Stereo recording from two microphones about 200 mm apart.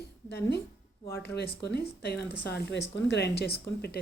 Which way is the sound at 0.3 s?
55° left (ahead or behind).